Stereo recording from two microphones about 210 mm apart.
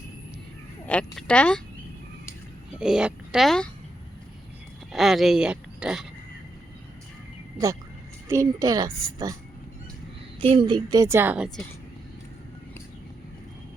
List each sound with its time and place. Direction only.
0.9 s speech: 5° left (ahead or behind)
2.7 s speech: 5° right (ahead or behind)
4.9 s speech: centre (ahead or behind)
8.3 s a woman's voice: 15° right (ahead or behind)
10.4 s a woman's voice: 25° right (ahead or behind); by 11.4 s 10° right (ahead or behind)